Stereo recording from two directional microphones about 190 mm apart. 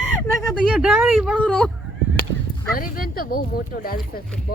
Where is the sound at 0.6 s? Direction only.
5° right (ahead or behind).